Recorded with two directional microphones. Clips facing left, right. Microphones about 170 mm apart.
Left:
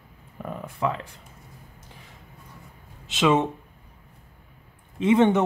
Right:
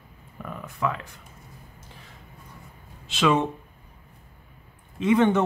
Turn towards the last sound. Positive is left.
turn(degrees=25)  # may be behind; listen again after turning